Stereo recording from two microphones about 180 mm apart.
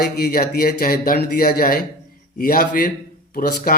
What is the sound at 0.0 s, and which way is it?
Speech, 55° left (ahead or behind).